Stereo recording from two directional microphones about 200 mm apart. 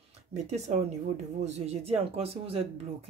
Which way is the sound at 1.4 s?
35° right (ahead or behind).